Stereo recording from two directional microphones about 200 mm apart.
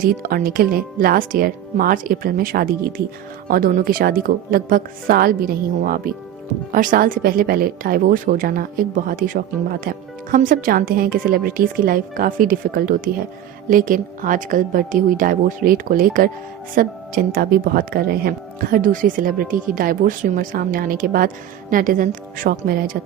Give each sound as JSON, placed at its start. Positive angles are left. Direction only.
{"t": 0.0, "sound": "speech", "side_deg": -45}